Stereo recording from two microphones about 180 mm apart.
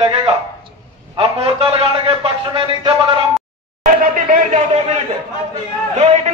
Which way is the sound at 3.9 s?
50° right (ahead or behind).